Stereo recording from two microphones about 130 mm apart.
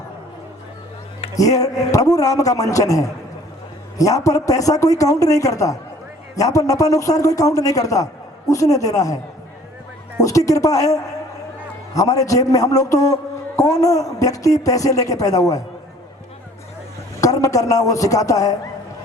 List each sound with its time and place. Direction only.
1.4 s a man's voice: 25° left (ahead or behind)
17.2 s a man's voice: 25° left (ahead or behind)